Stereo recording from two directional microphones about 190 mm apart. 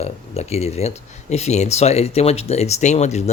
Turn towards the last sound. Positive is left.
turn(degrees=35)  # may be behind; listen again after turning